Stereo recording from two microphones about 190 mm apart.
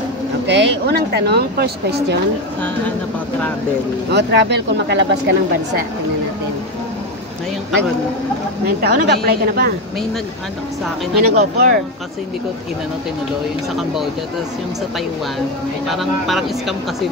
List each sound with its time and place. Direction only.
0.5 s speech: 65° right (ahead or behind)
4.1 s speech: 65° right (ahead or behind)
8.6 s speech: 60° right (ahead or behind)
11.1 s speech: 55° right (ahead or behind)
15.9 s speech: centre (ahead or behind)